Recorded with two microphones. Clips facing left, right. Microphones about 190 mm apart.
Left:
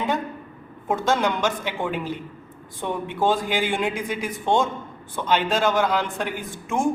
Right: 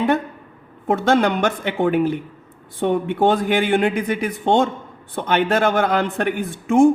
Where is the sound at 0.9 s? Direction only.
65° right (ahead or behind).